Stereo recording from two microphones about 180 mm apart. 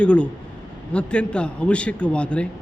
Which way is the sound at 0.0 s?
5° left (ahead or behind).